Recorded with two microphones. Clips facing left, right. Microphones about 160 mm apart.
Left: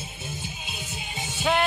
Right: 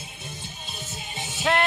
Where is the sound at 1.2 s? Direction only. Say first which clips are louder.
Even; centre (ahead or behind).